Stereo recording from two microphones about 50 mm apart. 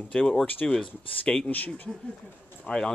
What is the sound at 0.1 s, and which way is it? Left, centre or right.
Speech, centre.